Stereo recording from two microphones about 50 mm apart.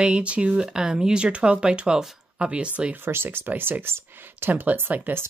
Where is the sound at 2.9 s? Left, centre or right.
Right.